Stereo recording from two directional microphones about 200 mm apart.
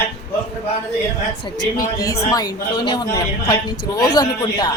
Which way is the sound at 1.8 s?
15° left (ahead or behind).